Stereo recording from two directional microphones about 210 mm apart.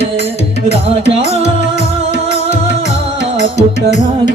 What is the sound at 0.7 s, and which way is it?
Music, 30° left (ahead or behind).